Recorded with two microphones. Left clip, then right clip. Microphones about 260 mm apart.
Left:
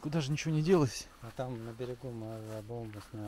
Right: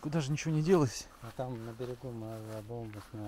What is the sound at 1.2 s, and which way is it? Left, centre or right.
Speech, left.